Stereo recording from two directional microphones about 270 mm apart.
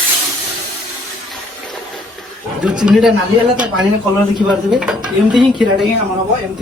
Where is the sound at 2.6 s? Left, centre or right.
Centre.